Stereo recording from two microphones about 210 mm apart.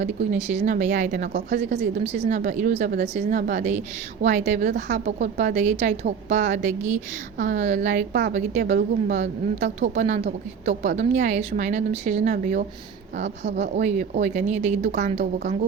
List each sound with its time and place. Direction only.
0.0 s a woman's voice: 35° right (ahead or behind)